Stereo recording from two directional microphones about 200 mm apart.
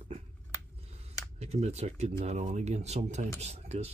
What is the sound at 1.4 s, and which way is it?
Speech, 30° right (ahead or behind).